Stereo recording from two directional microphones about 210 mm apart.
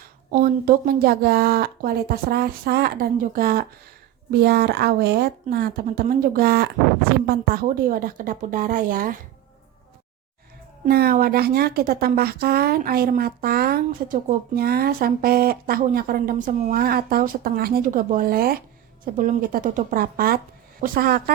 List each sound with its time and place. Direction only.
0.3 s a woman's voice: 40° right (ahead or behind)
10.8 s a woman's voice: 45° right (ahead or behind)